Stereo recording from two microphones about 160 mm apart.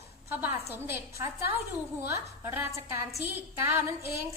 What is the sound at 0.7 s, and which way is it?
A woman's voice, 15° right (ahead or behind).